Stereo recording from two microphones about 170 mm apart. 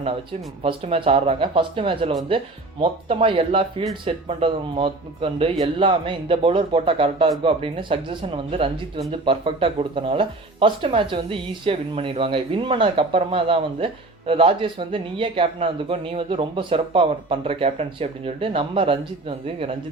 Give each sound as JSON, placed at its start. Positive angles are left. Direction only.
{"t": 0.6, "sound": "speech", "side_deg": -30}